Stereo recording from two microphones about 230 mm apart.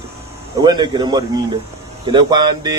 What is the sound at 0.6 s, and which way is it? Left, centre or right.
Speech, centre.